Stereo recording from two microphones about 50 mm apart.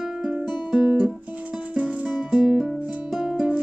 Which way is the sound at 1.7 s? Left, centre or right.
Right.